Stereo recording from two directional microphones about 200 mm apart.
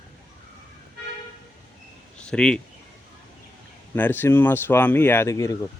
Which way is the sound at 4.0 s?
10° left (ahead or behind).